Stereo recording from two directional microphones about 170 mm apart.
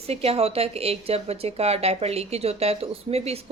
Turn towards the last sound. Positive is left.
turn(degrees=-35)  # may be behind; listen again after turning